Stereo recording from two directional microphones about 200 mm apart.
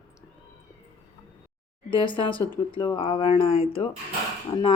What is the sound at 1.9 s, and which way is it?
Speech, 25° left (ahead or behind).